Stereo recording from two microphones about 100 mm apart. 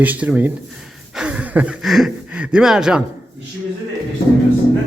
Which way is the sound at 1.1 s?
10° right (ahead or behind).